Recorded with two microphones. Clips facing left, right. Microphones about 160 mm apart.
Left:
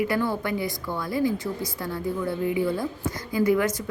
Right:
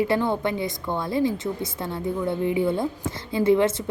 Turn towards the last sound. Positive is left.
turn(degrees=-25)  # may be behind; listen again after turning